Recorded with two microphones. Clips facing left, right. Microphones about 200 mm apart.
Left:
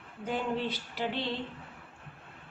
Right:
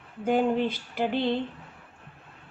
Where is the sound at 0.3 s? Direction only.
55° right (ahead or behind).